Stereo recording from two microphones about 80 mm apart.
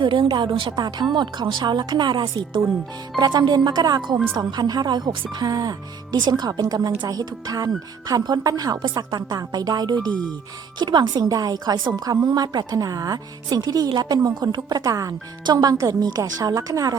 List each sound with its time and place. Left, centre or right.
0.0 s a woman's voice: right
1.1 s speech: right
3.2 s a woman's voice: right
11.3 s a woman's voice: right